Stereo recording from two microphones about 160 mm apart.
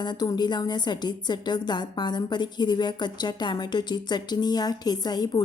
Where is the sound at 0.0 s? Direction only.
25° left (ahead or behind).